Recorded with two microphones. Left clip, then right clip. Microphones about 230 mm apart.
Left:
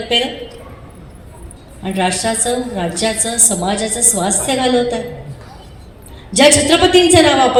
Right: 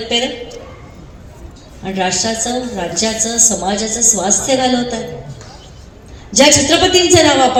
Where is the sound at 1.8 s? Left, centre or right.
Left.